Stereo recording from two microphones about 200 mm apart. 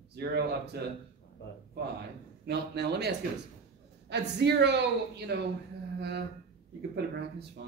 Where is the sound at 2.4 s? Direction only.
55° right (ahead or behind).